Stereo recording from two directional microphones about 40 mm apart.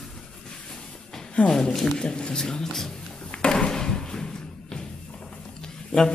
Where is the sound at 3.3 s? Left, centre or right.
Left.